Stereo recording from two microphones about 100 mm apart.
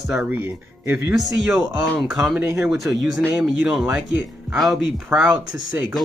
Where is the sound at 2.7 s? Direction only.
5° right (ahead or behind).